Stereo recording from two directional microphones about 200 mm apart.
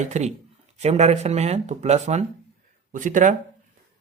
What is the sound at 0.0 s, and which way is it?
Speech, 35° right (ahead or behind).